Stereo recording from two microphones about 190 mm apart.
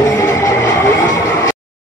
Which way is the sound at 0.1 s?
15° left (ahead or behind).